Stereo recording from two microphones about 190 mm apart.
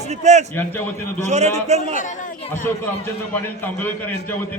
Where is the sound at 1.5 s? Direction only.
35° right (ahead or behind).